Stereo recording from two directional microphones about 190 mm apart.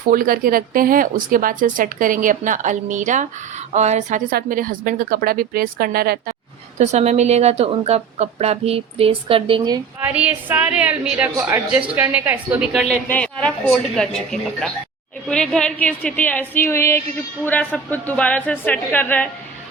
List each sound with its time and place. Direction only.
0.1 s a woman's voice: 50° right (ahead or behind)
4.3 s speech: 50° right (ahead or behind)
6.7 s a woman's voice: 35° right (ahead or behind)
10.0 s a woman's voice: 5° right (ahead or behind); by 19.3 s 10° left (ahead or behind)